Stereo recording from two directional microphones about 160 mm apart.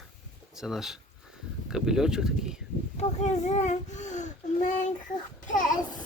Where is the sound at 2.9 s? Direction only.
45° left (ahead or behind).